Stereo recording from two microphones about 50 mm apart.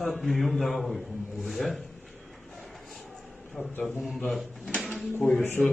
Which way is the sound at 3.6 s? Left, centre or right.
Left.